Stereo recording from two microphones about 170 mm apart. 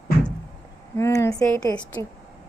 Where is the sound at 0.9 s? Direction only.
15° left (ahead or behind).